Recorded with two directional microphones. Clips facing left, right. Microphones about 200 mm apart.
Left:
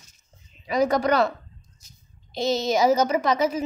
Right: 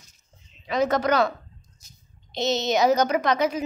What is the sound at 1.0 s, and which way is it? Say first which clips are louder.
A woman's voice: left 1 dB; 5° left (ahead or behind).